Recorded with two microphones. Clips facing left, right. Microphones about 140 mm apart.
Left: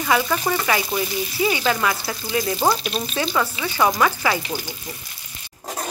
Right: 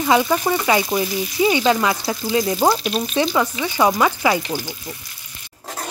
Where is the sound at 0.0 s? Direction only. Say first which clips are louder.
Right 4 dB; 20° right (ahead or behind).